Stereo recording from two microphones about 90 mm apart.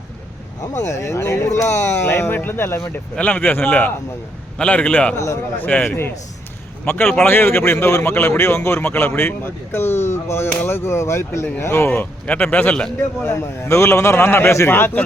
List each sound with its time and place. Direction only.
0.6 s a man's voice: 35° left (ahead or behind); by 5.1 s 15° left (ahead or behind)
5.1 s a man's voice: 30° left (ahead or behind)
5.6 s speech: 15° left (ahead or behind)
12.2 s a man's voice: 15° left (ahead or behind)
13.2 s a man's voice: 30° left (ahead or behind)